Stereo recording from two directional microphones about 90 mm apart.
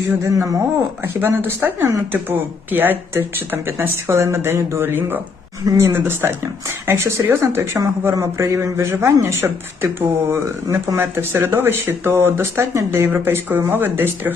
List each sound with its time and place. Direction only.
0.2 s speech: 35° right (ahead or behind)
1.0 s speech: 25° right (ahead or behind)